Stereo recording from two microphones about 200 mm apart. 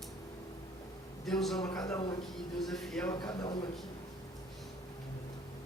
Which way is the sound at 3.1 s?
20° left (ahead or behind).